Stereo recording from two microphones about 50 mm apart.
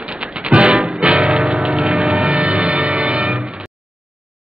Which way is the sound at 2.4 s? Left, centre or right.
Right.